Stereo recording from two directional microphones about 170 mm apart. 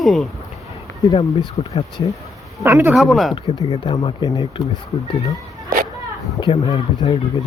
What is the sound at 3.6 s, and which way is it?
Speech, 30° left (ahead or behind).